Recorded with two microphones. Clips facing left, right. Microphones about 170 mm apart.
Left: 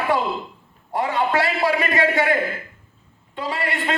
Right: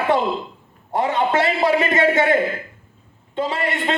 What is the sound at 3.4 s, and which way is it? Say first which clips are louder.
Speech: right 3 dB; 20° right (ahead or behind).